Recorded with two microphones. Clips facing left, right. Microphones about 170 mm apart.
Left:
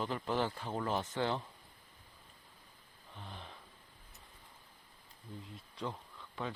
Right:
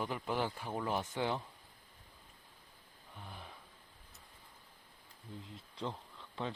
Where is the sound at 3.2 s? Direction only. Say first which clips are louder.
Left 1 dB; 10° right (ahead or behind).